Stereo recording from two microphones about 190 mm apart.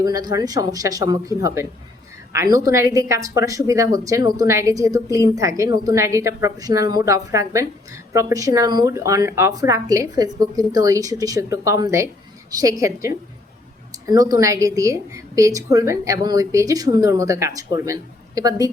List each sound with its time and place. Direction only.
0.0 s a woman's voice: 20° right (ahead or behind)